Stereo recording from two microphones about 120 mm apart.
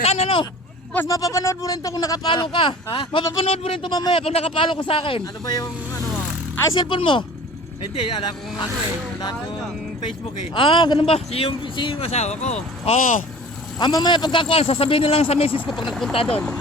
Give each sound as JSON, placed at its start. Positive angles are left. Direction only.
{"t": 0.0, "sound": "speech", "side_deg": 60}
{"t": 0.9, "sound": "a man's voice", "side_deg": 25}
{"t": 3.8, "sound": "a man's voice", "side_deg": 35}
{"t": 5.2, "sound": "speech", "side_deg": 35}
{"t": 6.7, "sound": "speech", "side_deg": 45}
{"t": 10.5, "sound": "a man's voice", "side_deg": 45}
{"t": 13.7, "sound": "a man's voice", "side_deg": 35}
{"t": 15.9, "sound": "speech", "side_deg": 5}